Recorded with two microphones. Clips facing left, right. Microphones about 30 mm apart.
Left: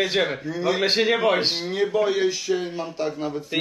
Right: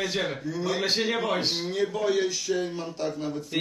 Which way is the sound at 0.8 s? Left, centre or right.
Left.